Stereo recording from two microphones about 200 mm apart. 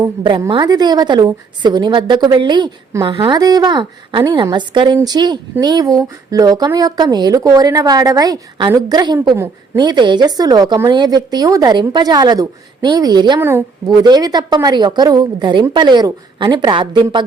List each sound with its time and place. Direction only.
0.0 s a woman's voice: 25° right (ahead or behind)